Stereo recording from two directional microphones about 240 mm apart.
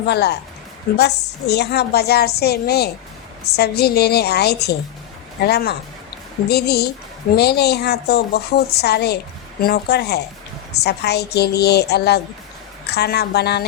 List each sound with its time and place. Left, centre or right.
0.0 s a woman's voice: left